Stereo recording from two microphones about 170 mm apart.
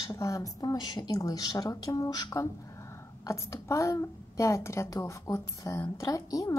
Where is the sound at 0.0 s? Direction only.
20° left (ahead or behind).